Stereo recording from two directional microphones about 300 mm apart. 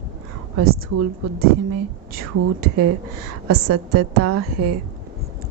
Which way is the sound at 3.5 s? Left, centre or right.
Right.